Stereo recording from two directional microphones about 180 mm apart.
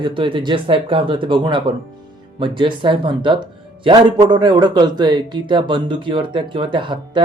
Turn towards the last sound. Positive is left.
turn(degrees=-25)  # may be behind; listen again after turning